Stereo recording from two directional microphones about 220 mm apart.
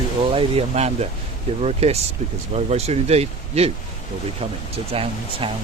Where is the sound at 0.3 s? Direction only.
30° right (ahead or behind).